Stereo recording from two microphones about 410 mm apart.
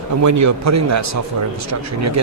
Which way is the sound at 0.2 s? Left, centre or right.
Right.